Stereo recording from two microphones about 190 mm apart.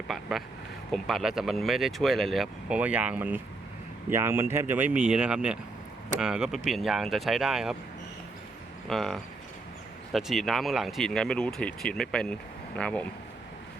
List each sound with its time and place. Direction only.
0.1 s speech: centre (ahead or behind)
8.9 s speech: centre (ahead or behind)